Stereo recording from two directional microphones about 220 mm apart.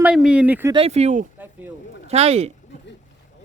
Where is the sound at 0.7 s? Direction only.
25° right (ahead or behind).